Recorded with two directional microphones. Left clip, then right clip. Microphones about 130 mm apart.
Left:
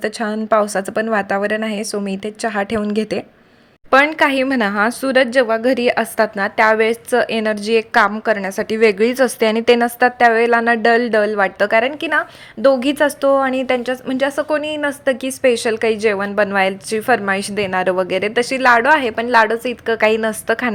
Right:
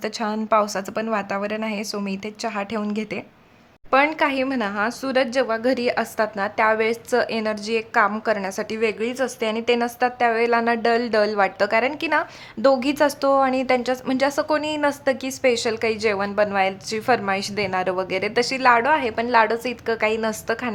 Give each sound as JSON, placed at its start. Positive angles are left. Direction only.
{"t": 0.0, "sound": "a woman's voice", "side_deg": 20}